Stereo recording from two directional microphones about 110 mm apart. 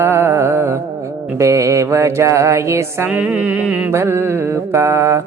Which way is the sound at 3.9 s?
25° right (ahead or behind).